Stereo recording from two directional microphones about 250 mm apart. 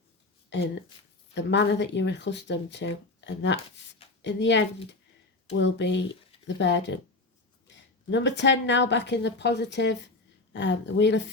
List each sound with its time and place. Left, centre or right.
1.3 s speech: left